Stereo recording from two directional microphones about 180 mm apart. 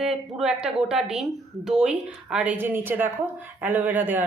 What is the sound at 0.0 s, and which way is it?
Speech, 5° right (ahead or behind).